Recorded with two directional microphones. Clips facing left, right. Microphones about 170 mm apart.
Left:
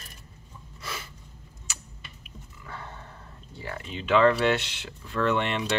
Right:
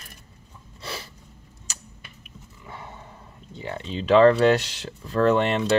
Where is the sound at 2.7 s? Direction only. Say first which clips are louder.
Right 1 dB; 15° right (ahead or behind).